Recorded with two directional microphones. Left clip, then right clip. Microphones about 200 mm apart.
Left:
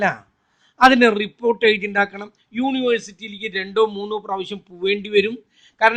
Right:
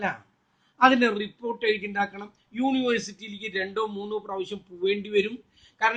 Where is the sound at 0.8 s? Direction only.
50° left (ahead or behind).